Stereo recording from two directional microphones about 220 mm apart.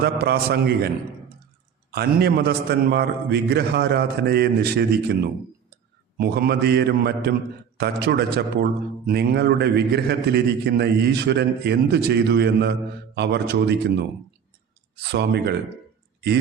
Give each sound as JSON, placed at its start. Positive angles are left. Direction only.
{"t": 0.0, "sound": "a man's voice", "side_deg": -45}
{"t": 1.9, "sound": "a man's voice", "side_deg": -45}
{"t": 15.0, "sound": "a man's voice", "side_deg": -50}